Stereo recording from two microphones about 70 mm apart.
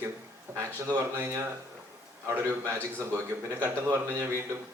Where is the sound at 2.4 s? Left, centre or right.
Right.